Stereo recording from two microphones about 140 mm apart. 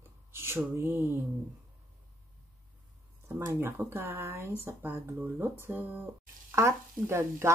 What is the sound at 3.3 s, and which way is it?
Speech, 20° right (ahead or behind).